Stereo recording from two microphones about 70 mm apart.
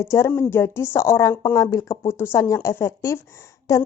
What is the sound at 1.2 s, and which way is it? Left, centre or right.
Speech, left.